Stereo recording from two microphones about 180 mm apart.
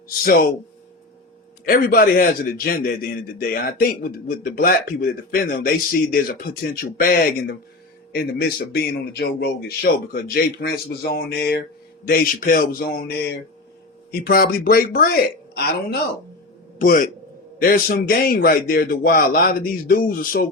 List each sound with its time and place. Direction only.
1.6 s a man's voice: 55° left (ahead or behind)